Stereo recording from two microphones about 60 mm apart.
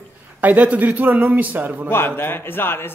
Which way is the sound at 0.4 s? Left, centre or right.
Right.